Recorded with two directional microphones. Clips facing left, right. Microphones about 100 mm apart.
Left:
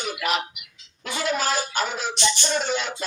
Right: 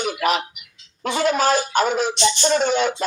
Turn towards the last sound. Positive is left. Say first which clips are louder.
# right 7 dB
turn(degrees=-50)  # may be behind; listen again after turning